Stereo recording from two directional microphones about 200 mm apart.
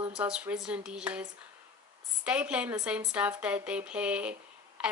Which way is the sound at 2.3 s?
5° right (ahead or behind).